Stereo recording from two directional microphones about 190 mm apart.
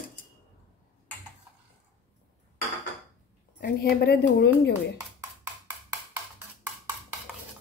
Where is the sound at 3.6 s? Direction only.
60° left (ahead or behind).